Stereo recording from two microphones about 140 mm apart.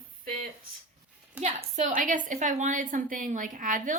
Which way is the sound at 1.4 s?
60° right (ahead or behind).